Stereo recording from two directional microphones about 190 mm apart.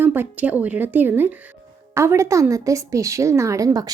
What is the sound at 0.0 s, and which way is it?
Speech, 10° right (ahead or behind).